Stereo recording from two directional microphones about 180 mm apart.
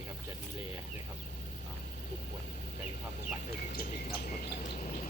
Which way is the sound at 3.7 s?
50° left (ahead or behind).